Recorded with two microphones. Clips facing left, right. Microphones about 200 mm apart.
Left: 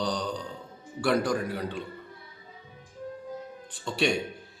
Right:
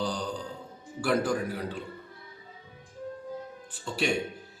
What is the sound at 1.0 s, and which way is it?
Speech, 5° right (ahead or behind).